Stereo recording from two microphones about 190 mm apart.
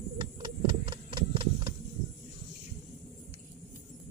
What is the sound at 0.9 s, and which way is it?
Clip-clop, 25° right (ahead or behind).